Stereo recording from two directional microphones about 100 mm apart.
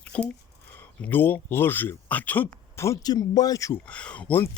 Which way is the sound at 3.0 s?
40° left (ahead or behind).